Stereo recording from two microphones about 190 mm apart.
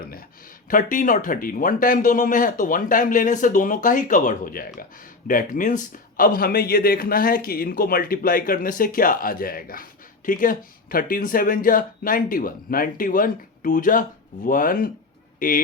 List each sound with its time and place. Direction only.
0.7 s speech: 45° left (ahead or behind)